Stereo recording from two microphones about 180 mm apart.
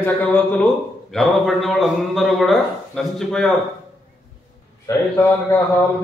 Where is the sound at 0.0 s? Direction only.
10° left (ahead or behind).